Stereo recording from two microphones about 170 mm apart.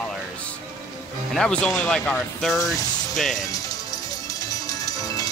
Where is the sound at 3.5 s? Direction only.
20° left (ahead or behind).